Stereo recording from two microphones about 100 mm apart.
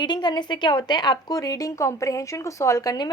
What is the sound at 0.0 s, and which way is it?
A woman's voice, 45° left (ahead or behind).